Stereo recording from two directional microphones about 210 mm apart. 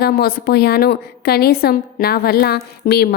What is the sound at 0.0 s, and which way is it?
A woman's voice, 45° left (ahead or behind).